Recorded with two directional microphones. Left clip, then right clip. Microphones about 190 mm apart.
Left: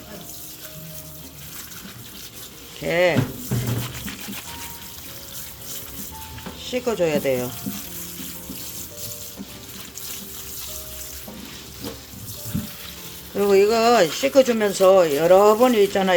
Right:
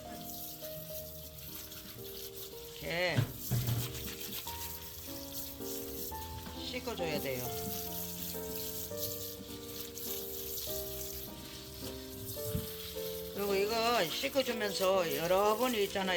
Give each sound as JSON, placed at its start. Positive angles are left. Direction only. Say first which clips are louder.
{"t": 2.8, "sound": "speech", "louder": "left 15 dB", "side_deg": 20}
{"t": 6.7, "sound": "speech", "louder": "left 16 dB", "side_deg": 30}
{"t": 13.3, "sound": "speech", "louder": "left 16 dB", "side_deg": 25}